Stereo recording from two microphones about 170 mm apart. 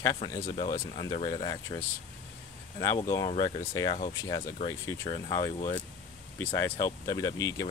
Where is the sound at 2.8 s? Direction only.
15° left (ahead or behind).